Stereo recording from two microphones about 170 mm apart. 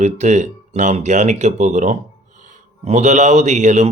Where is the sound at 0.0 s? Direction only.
45° right (ahead or behind).